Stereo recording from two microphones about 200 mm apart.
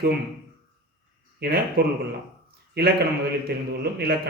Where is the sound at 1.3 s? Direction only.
50° right (ahead or behind).